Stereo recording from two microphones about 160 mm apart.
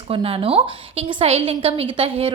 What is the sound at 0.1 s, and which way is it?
A woman's voice, 35° right (ahead or behind).